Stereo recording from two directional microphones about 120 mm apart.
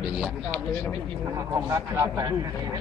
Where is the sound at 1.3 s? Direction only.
25° right (ahead or behind).